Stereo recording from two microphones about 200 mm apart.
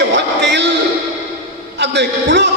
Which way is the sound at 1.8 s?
60° right (ahead or behind).